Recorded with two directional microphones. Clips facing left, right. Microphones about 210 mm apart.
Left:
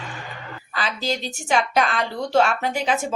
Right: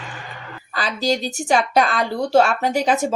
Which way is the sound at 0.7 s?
40° right (ahead or behind).